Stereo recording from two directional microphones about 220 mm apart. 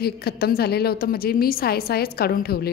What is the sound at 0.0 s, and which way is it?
A woman's voice, 45° left (ahead or behind).